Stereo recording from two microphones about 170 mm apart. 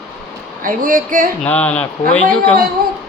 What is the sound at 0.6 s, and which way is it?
Speech, 55° right (ahead or behind).